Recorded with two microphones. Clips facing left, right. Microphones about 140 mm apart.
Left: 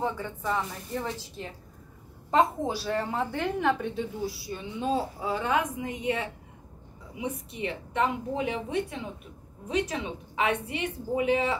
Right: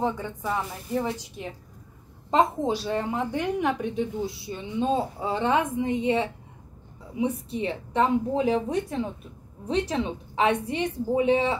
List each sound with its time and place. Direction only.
0.0 s a woman's voice: 15° right (ahead or behind)
2.6 s a woman's voice: 20° right (ahead or behind)